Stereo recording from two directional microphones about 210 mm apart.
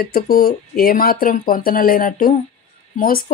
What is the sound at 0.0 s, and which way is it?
Speech, 45° left (ahead or behind).